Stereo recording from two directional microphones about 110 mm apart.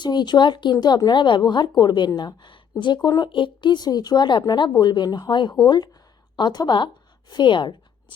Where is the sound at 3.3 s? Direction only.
45° left (ahead or behind).